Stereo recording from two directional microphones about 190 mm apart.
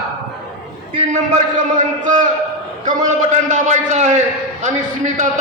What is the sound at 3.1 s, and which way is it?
A man's voice, 40° right (ahead or behind).